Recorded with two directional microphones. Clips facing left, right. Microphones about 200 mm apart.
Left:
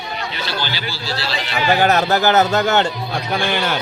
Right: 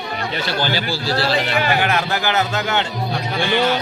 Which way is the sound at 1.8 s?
40° left (ahead or behind).